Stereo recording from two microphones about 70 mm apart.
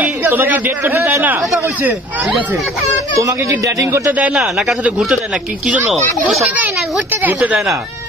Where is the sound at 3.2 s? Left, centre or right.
Right.